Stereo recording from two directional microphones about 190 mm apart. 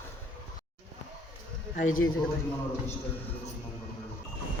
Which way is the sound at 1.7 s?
45° left (ahead or behind).